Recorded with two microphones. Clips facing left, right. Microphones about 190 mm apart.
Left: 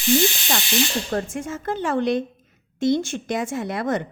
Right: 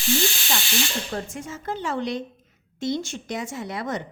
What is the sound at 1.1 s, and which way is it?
A woman's voice, 50° left (ahead or behind).